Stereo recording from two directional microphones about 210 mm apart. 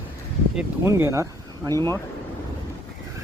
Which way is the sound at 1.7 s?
15° left (ahead or behind).